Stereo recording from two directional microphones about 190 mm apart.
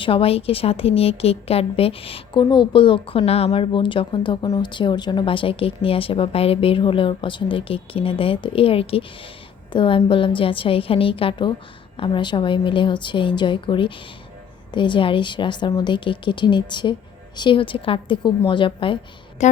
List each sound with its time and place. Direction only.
0.0 s a woman's voice: 30° left (ahead or behind)
19.4 s a woman's voice: 40° left (ahead or behind)